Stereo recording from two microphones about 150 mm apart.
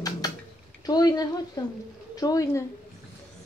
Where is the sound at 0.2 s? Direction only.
25° left (ahead or behind).